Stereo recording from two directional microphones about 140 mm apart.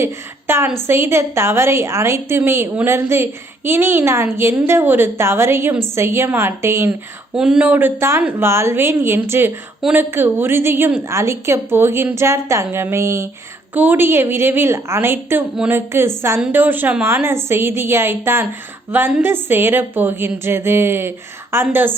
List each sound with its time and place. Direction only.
0.0 s a woman's voice: 15° right (ahead or behind)
7.3 s a woman's voice: 5° right (ahead or behind)